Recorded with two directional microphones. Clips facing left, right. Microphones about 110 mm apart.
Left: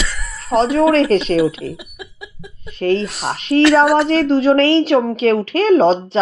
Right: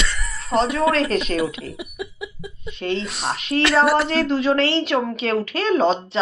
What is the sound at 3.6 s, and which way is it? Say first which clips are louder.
Speech: left 5 dB; centre (ahead or behind).